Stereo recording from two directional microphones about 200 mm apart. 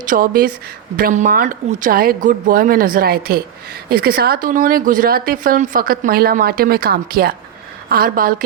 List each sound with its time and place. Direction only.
0.0 s speech: 45° right (ahead or behind)